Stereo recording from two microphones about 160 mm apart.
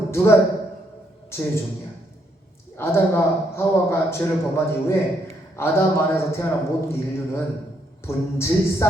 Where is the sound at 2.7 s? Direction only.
15° left (ahead or behind).